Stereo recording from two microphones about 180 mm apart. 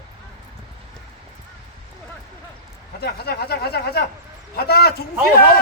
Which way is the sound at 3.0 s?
65° left (ahead or behind).